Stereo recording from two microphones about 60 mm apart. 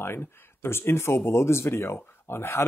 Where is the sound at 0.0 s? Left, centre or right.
Left.